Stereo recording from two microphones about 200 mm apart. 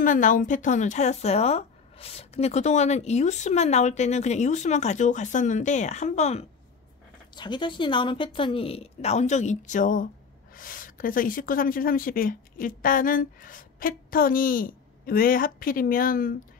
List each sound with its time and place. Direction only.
0.0 s speech: 40° left (ahead or behind)
7.3 s a woman's voice: 25° left (ahead or behind); by 16.3 s 45° left (ahead or behind)